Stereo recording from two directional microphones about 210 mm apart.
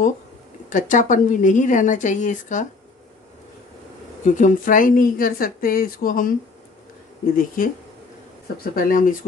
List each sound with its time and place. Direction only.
0.7 s a woman's voice: 40° left (ahead or behind)
4.3 s a woman's voice: 35° left (ahead or behind)
7.3 s a woman's voice: 40° left (ahead or behind)
8.7 s a woman's voice: 40° left (ahead or behind)